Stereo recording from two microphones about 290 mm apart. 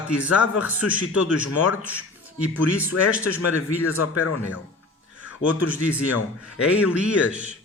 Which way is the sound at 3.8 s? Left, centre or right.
Left.